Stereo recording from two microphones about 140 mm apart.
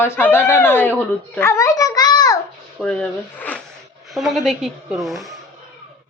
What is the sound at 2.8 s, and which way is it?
A woman's voice, 5° left (ahead or behind).